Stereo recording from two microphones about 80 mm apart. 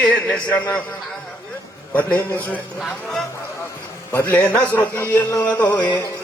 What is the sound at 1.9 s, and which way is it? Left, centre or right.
Speech, centre.